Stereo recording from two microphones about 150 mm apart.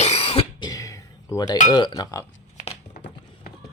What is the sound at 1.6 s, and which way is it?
Speech, 25° left (ahead or behind).